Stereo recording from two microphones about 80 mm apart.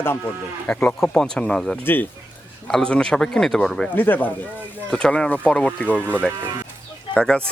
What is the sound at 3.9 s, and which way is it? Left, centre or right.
Speech, left.